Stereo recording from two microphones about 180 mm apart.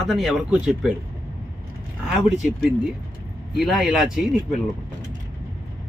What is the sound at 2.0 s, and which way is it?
Speech, centre (ahead or behind).